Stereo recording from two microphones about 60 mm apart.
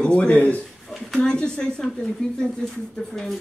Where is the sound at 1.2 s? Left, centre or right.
Centre.